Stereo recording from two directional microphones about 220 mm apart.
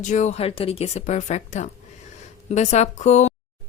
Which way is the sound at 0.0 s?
35° left (ahead or behind).